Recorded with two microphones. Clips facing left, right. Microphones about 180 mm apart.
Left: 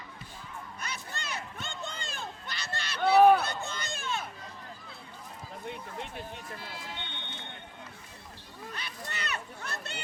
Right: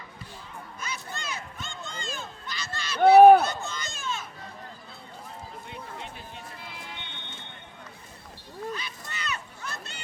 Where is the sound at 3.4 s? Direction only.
60° left (ahead or behind).